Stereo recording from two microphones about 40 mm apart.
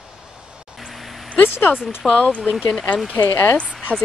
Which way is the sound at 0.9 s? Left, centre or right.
Centre.